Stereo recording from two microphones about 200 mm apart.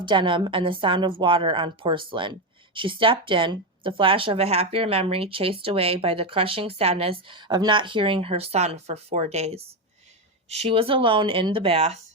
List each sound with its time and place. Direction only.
0.0 s speech: 25° right (ahead or behind)